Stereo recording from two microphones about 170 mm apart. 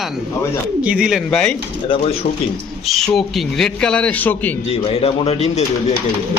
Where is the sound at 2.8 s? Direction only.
Centre (ahead or behind).